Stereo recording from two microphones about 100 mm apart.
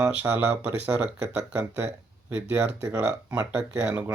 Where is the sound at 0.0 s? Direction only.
15° right (ahead or behind).